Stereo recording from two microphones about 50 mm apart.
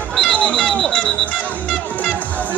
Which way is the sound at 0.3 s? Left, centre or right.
Left.